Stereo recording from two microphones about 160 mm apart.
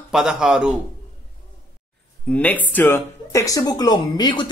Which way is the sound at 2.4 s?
10° left (ahead or behind).